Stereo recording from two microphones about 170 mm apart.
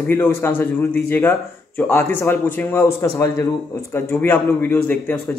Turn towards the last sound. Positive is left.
turn(degrees=10)  # may be behind; listen again after turning